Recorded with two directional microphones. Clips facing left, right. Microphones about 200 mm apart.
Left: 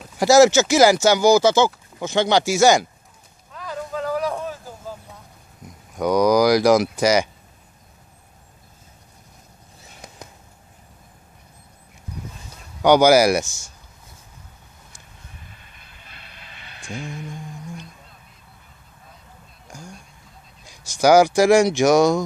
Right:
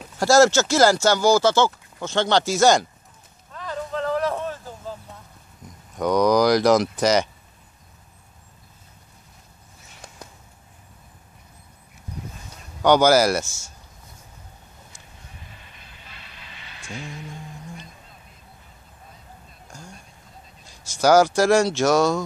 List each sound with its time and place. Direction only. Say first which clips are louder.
0.2 s speech: left 3 dB; 15° left (ahead or behind)
3.5 s vehicle: even; 5° left (ahead or behind)
5.9 s speech: left 2 dB; 5° left (ahead or behind)
12.8 s speech: left 3 dB; 10° left (ahead or behind)
15.4 s vehicle: right 1 dB; 50° left (ahead or behind)
20.6 s speech: left 2 dB; 15° left (ahead or behind)